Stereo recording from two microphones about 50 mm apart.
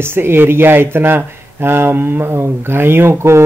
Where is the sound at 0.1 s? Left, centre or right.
Right.